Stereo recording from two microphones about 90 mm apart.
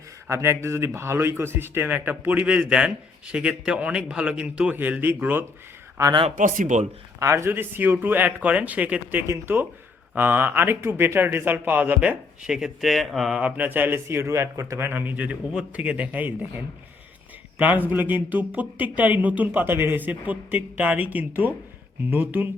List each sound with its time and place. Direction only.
0.3 s speech: 35° right (ahead or behind)
7.2 s speech: 30° right (ahead or behind)
9.2 s speech: 35° right (ahead or behind)
10.2 s speech: 20° right (ahead or behind); by 13.3 s centre (ahead or behind)
13.3 s speech: 15° right (ahead or behind)
17.6 s speech: 20° right (ahead or behind)